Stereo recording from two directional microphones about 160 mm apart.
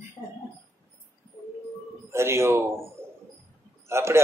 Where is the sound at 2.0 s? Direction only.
15° right (ahead or behind).